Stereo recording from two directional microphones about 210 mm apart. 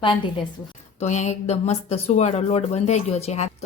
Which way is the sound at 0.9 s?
35° left (ahead or behind).